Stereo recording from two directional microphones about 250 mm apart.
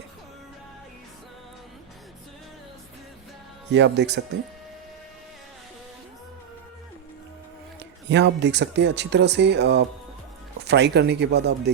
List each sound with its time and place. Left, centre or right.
3.7 s speech: right
7.8 s speech: right